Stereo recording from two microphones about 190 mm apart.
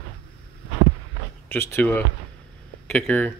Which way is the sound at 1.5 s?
10° left (ahead or behind).